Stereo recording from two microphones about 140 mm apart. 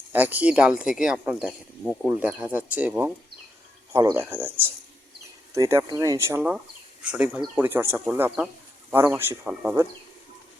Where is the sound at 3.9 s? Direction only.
20° right (ahead or behind).